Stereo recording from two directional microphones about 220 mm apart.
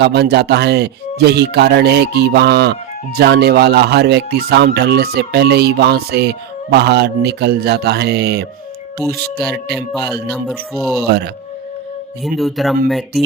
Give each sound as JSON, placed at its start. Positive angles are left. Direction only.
{"t": 0.0, "sound": "speech", "side_deg": -50}
{"t": 10.3, "sound": "speech", "side_deg": 0}
{"t": 12.2, "sound": "speech", "side_deg": 0}